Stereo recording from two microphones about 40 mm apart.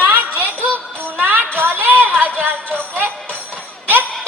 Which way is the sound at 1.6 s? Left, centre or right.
Right.